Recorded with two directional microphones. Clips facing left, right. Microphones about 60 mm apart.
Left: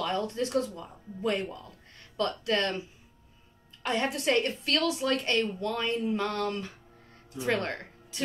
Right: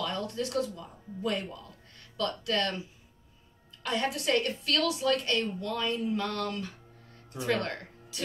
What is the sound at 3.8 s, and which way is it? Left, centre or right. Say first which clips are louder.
Speech: left 2 dB; left.